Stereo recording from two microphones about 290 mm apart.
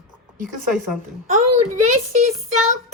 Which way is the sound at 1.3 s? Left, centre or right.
Right.